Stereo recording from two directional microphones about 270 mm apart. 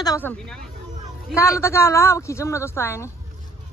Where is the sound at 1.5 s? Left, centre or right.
Centre.